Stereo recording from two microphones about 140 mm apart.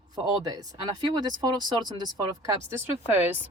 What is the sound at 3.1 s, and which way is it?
Speech, 15° right (ahead or behind).